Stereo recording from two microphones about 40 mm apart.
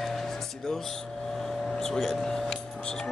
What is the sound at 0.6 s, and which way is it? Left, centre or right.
Speech, centre.